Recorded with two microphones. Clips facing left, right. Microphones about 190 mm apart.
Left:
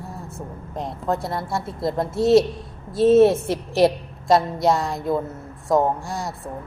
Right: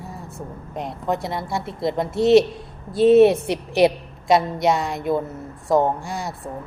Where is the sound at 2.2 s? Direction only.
25° right (ahead or behind).